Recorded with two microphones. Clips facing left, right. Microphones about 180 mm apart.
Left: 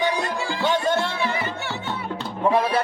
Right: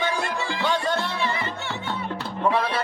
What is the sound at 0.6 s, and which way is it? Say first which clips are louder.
Music: left 3 dB; 20° left (ahead or behind).